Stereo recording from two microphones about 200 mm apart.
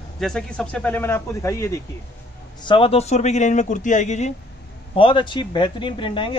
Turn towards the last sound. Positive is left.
turn(degrees=25)  # may be behind; listen again after turning